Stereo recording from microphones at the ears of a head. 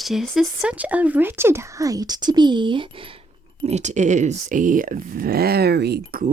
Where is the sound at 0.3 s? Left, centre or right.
Centre.